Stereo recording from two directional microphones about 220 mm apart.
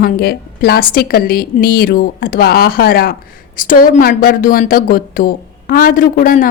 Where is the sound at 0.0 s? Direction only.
45° left (ahead or behind).